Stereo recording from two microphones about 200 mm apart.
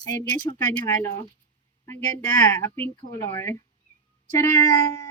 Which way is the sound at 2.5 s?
15° left (ahead or behind).